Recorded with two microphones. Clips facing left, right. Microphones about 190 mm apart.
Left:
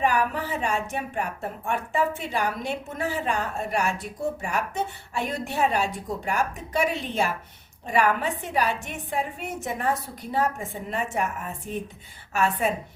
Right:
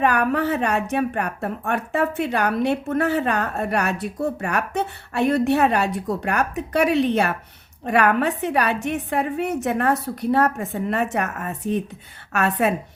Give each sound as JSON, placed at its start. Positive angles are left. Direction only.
{"t": 0.0, "sound": "speech", "side_deg": -65}